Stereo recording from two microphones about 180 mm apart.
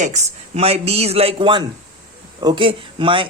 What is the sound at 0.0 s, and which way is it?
A man's voice, 40° right (ahead or behind).